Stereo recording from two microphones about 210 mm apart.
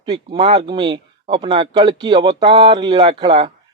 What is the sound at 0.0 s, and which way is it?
Speech, 20° right (ahead or behind).